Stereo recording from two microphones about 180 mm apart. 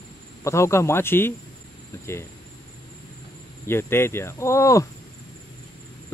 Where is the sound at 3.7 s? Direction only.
15° left (ahead or behind).